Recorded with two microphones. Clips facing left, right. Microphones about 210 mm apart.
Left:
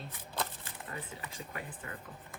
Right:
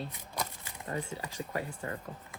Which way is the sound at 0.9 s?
30° right (ahead or behind).